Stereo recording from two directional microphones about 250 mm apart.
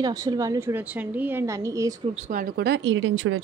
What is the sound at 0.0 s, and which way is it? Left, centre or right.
A woman's voice, centre.